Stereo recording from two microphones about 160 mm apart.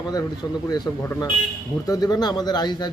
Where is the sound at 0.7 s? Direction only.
20° left (ahead or behind).